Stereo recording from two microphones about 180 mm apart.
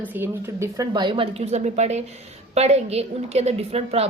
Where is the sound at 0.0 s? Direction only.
10° right (ahead or behind).